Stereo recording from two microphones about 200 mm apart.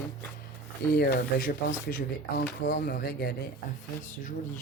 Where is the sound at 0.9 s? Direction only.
50° left (ahead or behind).